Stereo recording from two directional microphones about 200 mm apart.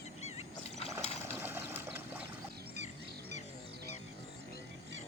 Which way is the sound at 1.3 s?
10° right (ahead or behind).